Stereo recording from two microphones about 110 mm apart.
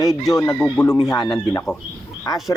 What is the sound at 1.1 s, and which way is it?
Speech, 40° left (ahead or behind).